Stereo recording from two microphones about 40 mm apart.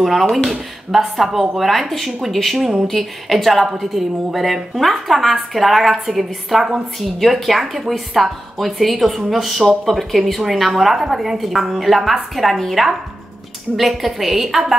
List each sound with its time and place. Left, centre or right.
0.0 s speech: centre